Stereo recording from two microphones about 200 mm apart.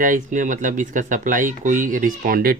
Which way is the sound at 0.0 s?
40° right (ahead or behind).